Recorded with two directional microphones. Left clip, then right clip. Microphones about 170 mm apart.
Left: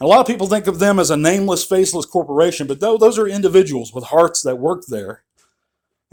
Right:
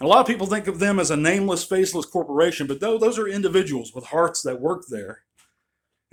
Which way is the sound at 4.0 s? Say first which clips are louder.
Left 8 dB; 40° left (ahead or behind).